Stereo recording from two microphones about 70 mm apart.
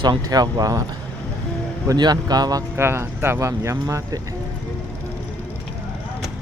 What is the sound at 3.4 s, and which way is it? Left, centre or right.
Speech, right.